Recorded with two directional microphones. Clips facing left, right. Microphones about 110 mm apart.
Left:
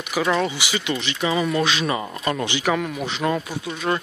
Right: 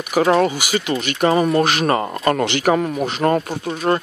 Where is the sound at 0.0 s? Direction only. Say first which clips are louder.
Right 6 dB; 45° right (ahead or behind).